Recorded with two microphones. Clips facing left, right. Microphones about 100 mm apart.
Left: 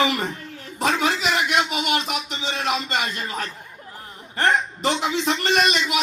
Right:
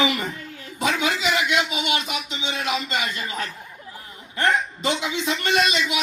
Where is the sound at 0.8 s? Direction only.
35° left (ahead or behind).